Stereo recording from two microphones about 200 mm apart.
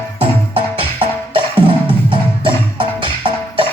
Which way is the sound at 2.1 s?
25° right (ahead or behind).